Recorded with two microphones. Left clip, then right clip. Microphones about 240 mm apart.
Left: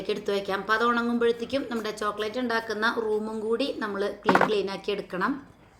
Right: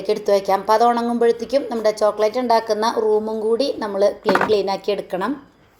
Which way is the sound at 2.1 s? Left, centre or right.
Centre.